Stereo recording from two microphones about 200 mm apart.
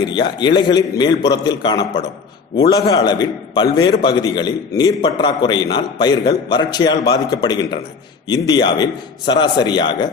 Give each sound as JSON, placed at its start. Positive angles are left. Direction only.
{"t": 0.0, "sound": "a man's voice", "side_deg": 20}